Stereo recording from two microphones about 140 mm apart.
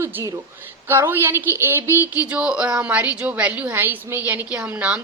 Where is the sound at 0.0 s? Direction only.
20° right (ahead or behind).